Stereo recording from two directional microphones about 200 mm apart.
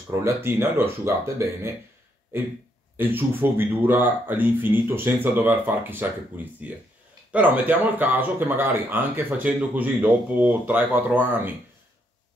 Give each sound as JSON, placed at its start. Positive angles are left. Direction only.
{"t": 0.1, "sound": "speech", "side_deg": -10}
{"t": 3.0, "sound": "speech", "side_deg": -10}